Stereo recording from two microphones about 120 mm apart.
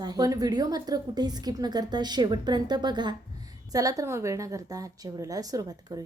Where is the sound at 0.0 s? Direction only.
30° right (ahead or behind).